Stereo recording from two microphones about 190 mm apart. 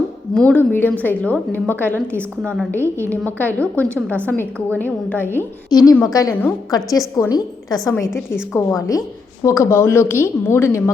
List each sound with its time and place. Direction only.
0.3 s a woman's voice: 10° left (ahead or behind)